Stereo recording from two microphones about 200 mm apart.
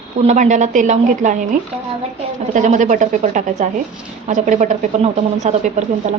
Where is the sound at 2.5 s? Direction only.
40° right (ahead or behind).